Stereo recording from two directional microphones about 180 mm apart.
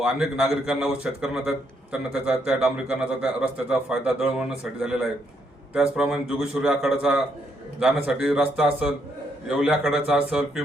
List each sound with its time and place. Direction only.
0.0 s a man's voice: 5° right (ahead or behind)